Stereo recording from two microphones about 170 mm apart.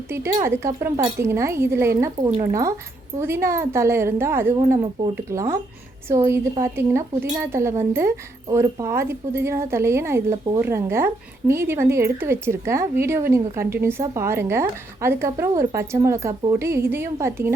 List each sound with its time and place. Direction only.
0.1 s speech: 15° right (ahead or behind)
4.8 s speech: 25° right (ahead or behind)